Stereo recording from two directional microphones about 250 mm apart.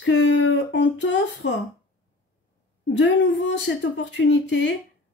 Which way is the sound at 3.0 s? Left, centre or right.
Left.